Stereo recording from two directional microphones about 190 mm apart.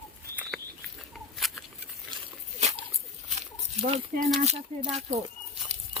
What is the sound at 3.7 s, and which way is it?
Speech, 35° right (ahead or behind).